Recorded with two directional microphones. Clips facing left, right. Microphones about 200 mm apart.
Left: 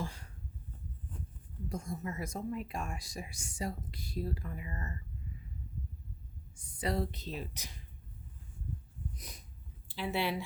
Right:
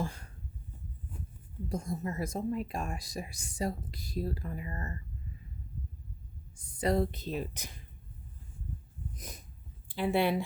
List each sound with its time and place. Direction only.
0.0 s a sound: 50° right (ahead or behind)
1.7 s speech: 35° right (ahead or behind)
6.6 s speech: 45° right (ahead or behind)
9.1 s snort: 45° right (ahead or behind)
9.9 s speech: 50° right (ahead or behind)